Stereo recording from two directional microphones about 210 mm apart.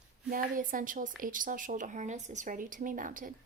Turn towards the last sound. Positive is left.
turn(degrees=-40)  # may be behind; listen again after turning